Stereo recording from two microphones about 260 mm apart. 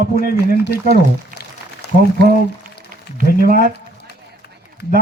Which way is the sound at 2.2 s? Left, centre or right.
Right.